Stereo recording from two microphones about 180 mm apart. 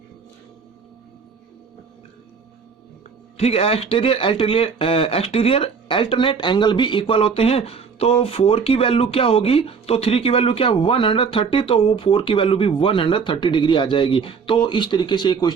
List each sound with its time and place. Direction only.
3.3 s speech: 35° left (ahead or behind)